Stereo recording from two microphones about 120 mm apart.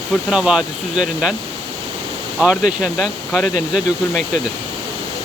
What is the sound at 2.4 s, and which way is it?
Speech, 10° right (ahead or behind).